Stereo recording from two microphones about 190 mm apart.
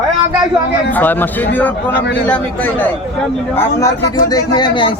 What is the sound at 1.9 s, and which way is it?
Speech, 65° left (ahead or behind).